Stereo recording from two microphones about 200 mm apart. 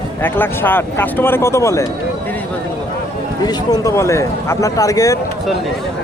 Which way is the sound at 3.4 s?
20° left (ahead or behind).